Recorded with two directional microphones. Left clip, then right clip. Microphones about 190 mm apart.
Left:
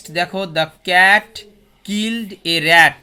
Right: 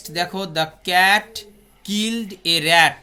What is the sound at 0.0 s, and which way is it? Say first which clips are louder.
Speech: left 4 dB; 30° left (ahead or behind).